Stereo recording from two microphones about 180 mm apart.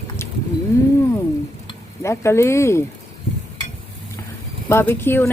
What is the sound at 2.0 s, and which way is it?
Speech, 15° left (ahead or behind).